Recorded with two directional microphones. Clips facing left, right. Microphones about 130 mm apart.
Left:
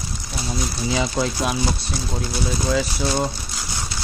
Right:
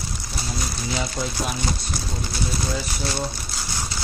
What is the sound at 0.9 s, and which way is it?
Speech, 90° left.